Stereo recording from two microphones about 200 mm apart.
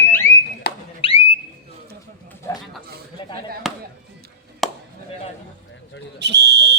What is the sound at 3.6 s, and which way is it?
Chop, centre (ahead or behind).